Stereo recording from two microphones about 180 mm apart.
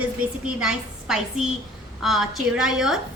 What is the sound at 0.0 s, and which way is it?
A woman's voice, 5° right (ahead or behind).